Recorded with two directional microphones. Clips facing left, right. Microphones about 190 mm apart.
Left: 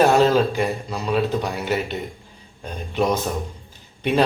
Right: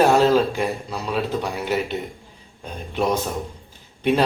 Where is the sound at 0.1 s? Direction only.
Centre (ahead or behind).